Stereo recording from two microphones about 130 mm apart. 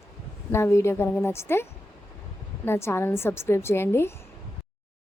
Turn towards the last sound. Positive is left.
turn(degrees=20)  # may be behind; listen again after turning